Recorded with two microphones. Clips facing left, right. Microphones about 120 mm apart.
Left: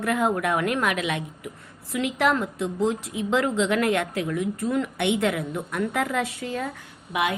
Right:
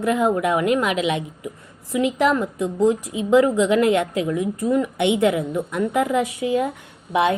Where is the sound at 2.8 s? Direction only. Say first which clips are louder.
Right 7 dB; 65° right (ahead or behind).